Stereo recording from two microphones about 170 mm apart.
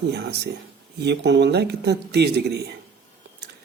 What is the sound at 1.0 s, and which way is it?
Speech, 90° right.